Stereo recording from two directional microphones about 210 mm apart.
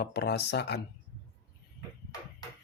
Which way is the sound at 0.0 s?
50° left (ahead or behind).